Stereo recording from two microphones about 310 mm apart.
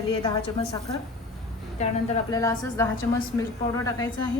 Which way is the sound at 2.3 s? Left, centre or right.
Centre.